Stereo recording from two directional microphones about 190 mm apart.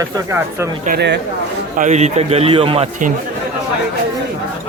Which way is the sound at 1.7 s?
40° right (ahead or behind).